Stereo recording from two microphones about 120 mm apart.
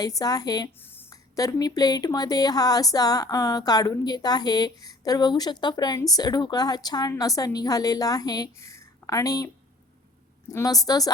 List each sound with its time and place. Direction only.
0.0 s speech: 30° left (ahead or behind)
0.8 s a sound: 20° left (ahead or behind)
1.1 s a woman's voice: 30° left (ahead or behind)
10.5 s speech: 30° left (ahead or behind)